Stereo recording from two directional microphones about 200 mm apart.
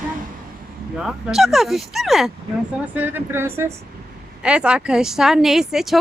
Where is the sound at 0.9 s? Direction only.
Centre (ahead or behind).